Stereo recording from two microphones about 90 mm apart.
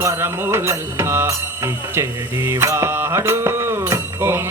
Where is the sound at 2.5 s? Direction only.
30° right (ahead or behind).